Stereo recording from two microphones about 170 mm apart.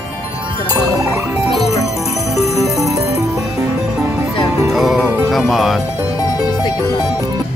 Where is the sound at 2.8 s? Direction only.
20° right (ahead or behind).